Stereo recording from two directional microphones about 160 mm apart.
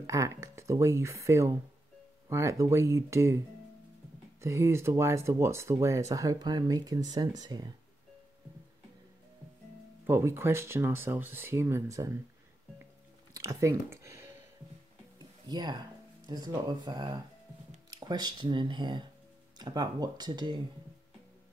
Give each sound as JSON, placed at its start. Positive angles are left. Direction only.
{"t": 0.0, "sound": "speech", "side_deg": -20}
{"t": 10.0, "sound": "speech", "side_deg": -15}
{"t": 13.3, "sound": "a sound", "side_deg": -20}
{"t": 15.4, "sound": "speech", "side_deg": -25}